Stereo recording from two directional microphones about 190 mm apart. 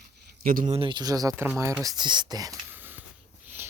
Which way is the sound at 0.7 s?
25° right (ahead or behind).